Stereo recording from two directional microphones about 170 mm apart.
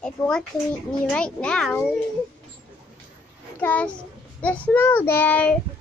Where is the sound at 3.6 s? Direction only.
10° left (ahead or behind).